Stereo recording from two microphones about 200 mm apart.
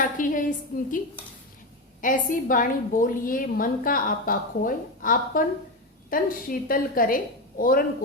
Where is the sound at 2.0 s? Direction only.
40° left (ahead or behind).